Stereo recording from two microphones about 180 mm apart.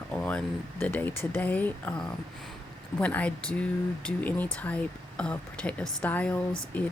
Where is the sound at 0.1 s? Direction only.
5° left (ahead or behind).